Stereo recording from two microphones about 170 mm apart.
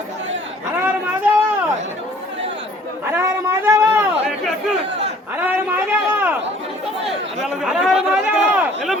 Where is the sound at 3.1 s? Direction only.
15° right (ahead or behind).